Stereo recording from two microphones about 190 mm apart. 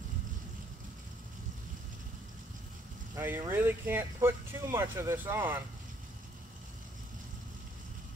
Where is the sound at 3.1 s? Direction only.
10° right (ahead or behind).